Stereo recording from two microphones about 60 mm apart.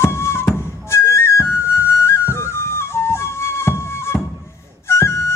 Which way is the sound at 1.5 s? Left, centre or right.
Left.